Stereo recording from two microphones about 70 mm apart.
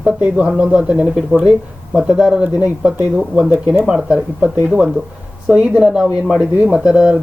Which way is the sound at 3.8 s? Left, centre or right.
Centre.